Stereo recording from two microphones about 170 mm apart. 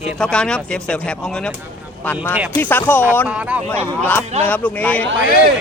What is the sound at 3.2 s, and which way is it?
Speech, 10° right (ahead or behind).